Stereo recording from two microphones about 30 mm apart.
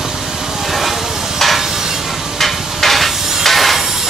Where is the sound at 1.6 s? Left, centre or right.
Centre.